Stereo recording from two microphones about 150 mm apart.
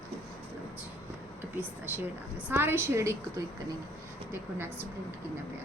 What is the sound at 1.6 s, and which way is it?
A woman's voice, 10° right (ahead or behind).